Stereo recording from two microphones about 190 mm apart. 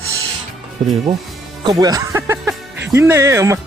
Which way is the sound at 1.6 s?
20° right (ahead or behind).